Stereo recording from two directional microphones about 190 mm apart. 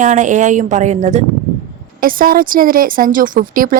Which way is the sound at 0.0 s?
40° right (ahead or behind).